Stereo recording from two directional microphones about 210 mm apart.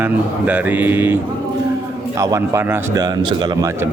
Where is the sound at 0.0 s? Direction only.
10° right (ahead or behind).